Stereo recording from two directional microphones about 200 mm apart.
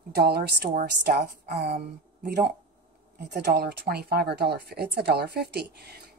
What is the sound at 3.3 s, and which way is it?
A woman's voice, 55° right (ahead or behind).